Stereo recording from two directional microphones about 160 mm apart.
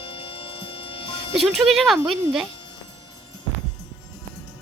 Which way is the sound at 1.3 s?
Centre (ahead or behind).